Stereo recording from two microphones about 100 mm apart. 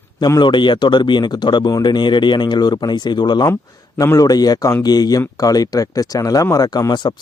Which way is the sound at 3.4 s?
30° left (ahead or behind).